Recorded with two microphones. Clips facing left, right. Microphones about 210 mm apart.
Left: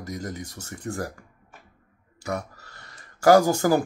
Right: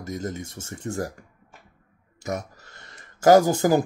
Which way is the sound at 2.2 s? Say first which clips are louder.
Even; 20° right (ahead or behind).